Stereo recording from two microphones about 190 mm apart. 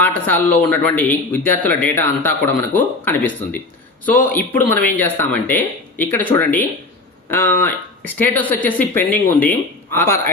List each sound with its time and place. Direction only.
0.0 s a man's voice: 10° left (ahead or behind)